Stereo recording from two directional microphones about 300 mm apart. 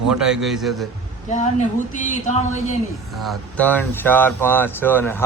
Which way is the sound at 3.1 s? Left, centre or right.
Centre.